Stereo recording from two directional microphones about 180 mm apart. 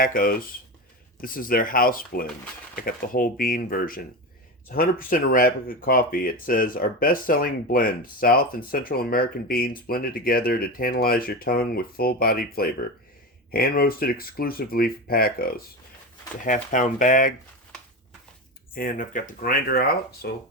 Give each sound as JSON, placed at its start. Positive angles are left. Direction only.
{"t": 0.0, "sound": "speech", "side_deg": 55}
{"t": 18.7, "sound": "speech", "side_deg": 50}